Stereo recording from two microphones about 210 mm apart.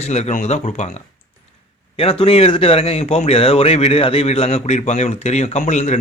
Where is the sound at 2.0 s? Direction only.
25° left (ahead or behind).